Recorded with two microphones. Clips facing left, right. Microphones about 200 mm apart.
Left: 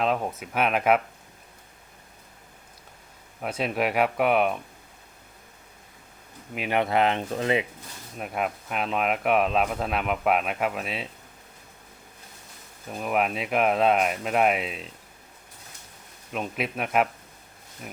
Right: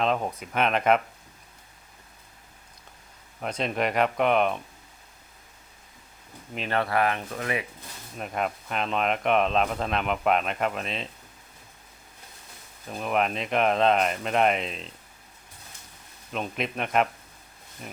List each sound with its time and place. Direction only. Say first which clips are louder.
0.0 s speech: even; 5° left (ahead or behind)
3.4 s speech: left 1 dB; 5° left (ahead or behind)
6.5 s speech: left 2 dB; 10° left (ahead or behind)
8.2 s speech: even; 5° left (ahead or behind)
12.9 s speech: even; 5° left (ahead or behind)
16.3 s speech: left 1 dB; 5° left (ahead or behind)